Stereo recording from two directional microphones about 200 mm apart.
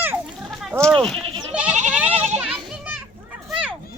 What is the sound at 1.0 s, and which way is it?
Goat, centre (ahead or behind).